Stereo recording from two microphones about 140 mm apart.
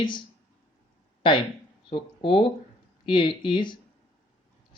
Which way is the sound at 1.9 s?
40° left (ahead or behind).